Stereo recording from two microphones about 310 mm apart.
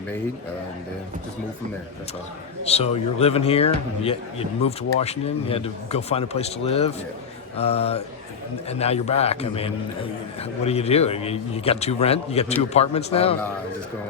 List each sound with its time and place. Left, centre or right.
2.6 s speech: centre